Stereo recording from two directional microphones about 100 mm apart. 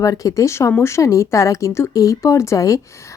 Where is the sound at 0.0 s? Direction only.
35° left (ahead or behind).